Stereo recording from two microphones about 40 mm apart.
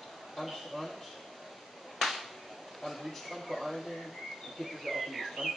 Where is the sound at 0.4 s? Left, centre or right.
Centre.